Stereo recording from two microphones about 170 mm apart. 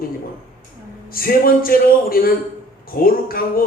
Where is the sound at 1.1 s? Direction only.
60° left (ahead or behind).